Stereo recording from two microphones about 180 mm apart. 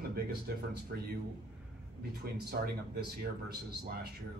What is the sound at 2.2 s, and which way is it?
Speech, 60° right (ahead or behind).